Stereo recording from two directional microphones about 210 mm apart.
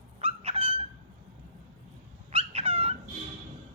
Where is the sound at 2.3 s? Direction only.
25° right (ahead or behind).